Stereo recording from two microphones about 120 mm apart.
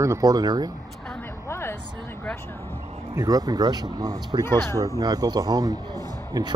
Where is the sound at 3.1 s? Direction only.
30° right (ahead or behind).